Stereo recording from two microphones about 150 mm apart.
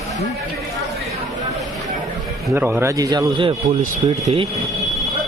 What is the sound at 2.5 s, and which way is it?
Speech, 15° right (ahead or behind).